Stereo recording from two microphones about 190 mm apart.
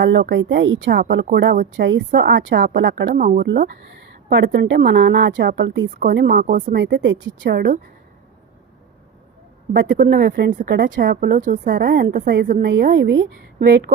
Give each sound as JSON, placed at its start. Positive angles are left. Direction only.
{"t": 0.0, "sound": "speech", "side_deg": -70}
{"t": 4.3, "sound": "a woman's voice", "side_deg": -70}
{"t": 6.0, "sound": "speech", "side_deg": -55}
{"t": 6.7, "sound": "a woman's voice", "side_deg": -65}
{"t": 9.7, "sound": "a woman's voice", "side_deg": -65}
{"t": 11.3, "sound": "speech", "side_deg": -45}
{"t": 11.7, "sound": "a woman's voice", "side_deg": -60}
{"t": 12.0, "sound": "speech", "side_deg": -45}
{"t": 12.6, "sound": "a woman's voice", "side_deg": -60}